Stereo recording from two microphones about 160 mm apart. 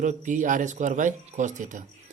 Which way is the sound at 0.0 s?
50° right (ahead or behind).